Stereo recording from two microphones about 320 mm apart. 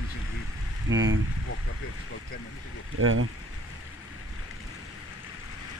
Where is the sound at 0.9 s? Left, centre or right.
Right.